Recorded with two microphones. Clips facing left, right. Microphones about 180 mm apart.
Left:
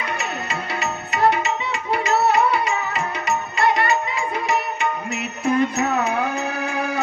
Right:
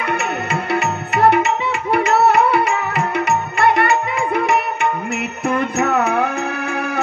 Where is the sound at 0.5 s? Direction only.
55° right (ahead or behind).